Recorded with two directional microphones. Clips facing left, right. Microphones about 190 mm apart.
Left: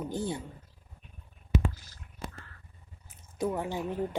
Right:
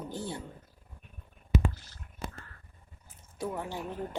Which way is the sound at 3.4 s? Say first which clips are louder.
Left 4 dB; 15° left (ahead or behind).